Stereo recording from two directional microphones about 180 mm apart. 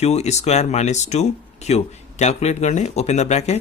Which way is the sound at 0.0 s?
35° left (ahead or behind).